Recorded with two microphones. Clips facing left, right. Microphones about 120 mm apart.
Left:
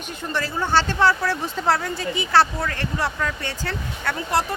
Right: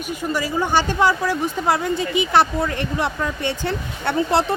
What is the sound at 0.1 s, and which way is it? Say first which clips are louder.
Speech: right 4 dB; 10° right (ahead or behind).